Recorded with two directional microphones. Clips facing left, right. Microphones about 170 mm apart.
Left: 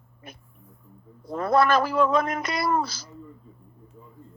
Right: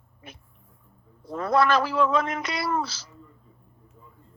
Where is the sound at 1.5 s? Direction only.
50° left (ahead or behind).